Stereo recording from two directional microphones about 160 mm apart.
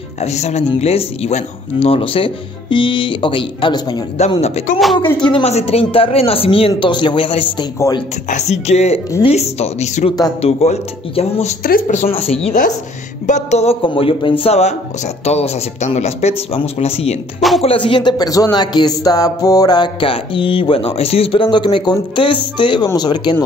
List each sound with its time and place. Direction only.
0.2 s speech: 45° left (ahead or behind); by 4.0 s 25° left (ahead or behind)
4.4 s speech: 40° left (ahead or behind)
4.9 s speech: 30° left (ahead or behind)
8.3 s music: 45° left (ahead or behind)
9.2 s speech: 40° left (ahead or behind)
11.6 s speech: 55° left (ahead or behind)
12.1 s speech: 40° left (ahead or behind)
14.4 s music: 40° left (ahead or behind)
15.2 s speech: 40° left (ahead or behind)
17.4 s music: centre (ahead or behind)
17.6 s speech: 35° left (ahead or behind)